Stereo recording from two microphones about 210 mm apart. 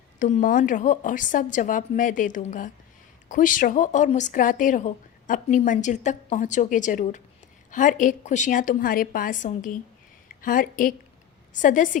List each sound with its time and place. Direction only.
0.2 s speech: 35° left (ahead or behind)